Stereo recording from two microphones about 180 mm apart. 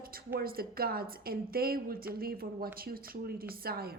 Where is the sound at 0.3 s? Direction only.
55° right (ahead or behind).